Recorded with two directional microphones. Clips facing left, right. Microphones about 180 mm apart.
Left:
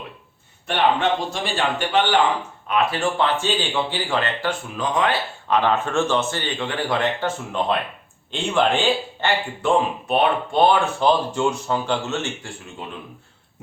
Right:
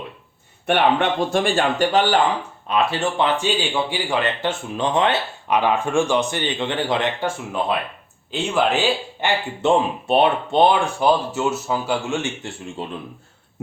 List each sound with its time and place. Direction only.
0.7 s speech: 60° right (ahead or behind)
2.6 s speech: 20° right (ahead or behind)
5.5 s speech: 10° right (ahead or behind)
9.6 s speech: 25° right (ahead or behind)
12.8 s speech: 30° right (ahead or behind)